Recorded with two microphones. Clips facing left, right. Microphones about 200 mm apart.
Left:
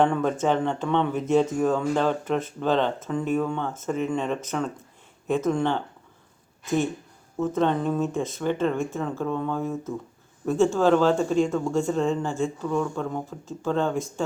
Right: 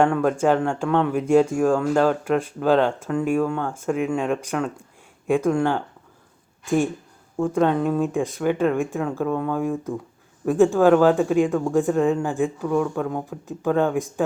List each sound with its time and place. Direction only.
0.0 s speech: 5° right (ahead or behind)
7.5 s speech: 5° right (ahead or behind)